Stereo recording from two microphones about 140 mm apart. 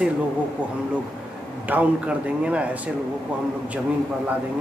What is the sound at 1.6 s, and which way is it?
A man's voice, 10° right (ahead or behind).